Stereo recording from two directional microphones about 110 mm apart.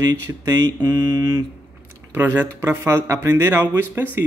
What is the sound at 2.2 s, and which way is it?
Speech, 20° right (ahead or behind).